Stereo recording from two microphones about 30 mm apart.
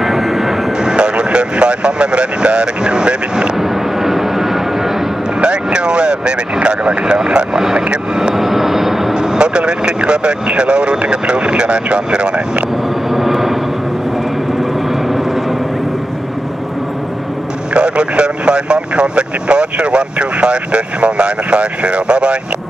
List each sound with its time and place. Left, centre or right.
0.0 s vehicle: centre
0.8 s vehicle: right
3.5 s vehicle: centre
5.4 s vehicle: right
8.4 s vehicle: centre
9.1 s speech: right
13.1 s vehicle: centre
17.7 s speech: right